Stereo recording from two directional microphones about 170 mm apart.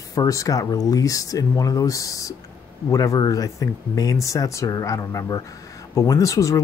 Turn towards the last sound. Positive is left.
turn(degrees=20)  # may be behind; listen again after turning